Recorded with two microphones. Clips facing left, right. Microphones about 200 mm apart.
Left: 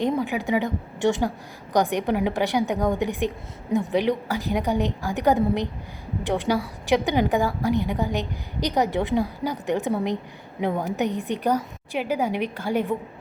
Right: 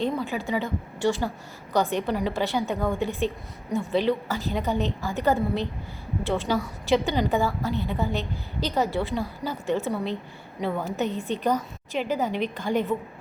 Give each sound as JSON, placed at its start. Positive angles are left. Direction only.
{"t": 0.0, "sound": "a woman's voice", "side_deg": 15}